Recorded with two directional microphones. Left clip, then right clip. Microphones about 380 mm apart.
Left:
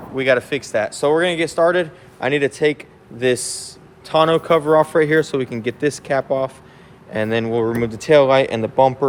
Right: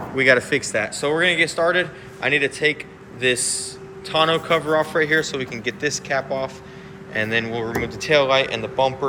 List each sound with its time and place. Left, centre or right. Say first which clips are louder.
0.2 s speech: right 1 dB; centre